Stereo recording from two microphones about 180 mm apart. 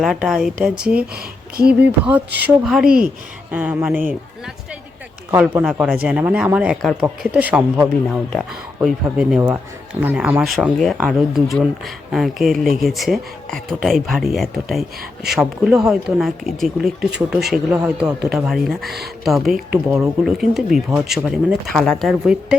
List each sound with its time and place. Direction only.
0.0 s a man's voice: centre (ahead or behind)
1.1 s speech: 60° right (ahead or behind)
1.8 s a man's voice: 10° right (ahead or behind)
10.4 s a man's voice: centre (ahead or behind)